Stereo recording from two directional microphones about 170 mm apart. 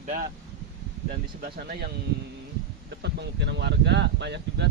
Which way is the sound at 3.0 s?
90° right.